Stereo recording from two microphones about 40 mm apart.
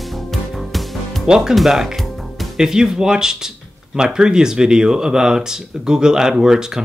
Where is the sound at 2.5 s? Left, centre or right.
Centre.